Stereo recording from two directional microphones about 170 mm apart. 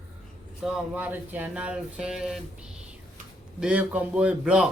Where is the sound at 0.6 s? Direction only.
5° right (ahead or behind).